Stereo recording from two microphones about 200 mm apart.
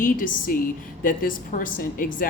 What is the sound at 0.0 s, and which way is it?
Speech, 45° left (ahead or behind).